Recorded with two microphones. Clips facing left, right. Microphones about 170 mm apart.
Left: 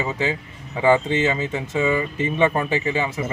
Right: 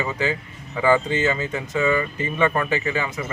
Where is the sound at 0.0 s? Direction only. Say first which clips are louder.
Even; 25° left (ahead or behind).